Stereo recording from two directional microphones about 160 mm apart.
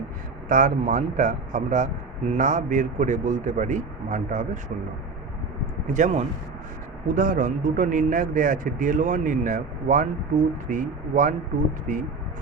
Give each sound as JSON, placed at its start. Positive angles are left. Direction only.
{"t": 0.4, "sound": "a man's voice", "side_deg": -50}
{"t": 5.9, "sound": "a man's voice", "side_deg": -50}